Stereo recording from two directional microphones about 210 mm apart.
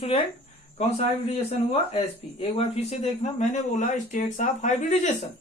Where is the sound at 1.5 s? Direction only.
30° left (ahead or behind).